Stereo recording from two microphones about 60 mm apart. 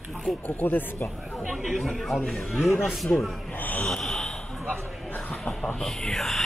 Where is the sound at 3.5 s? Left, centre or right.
Left.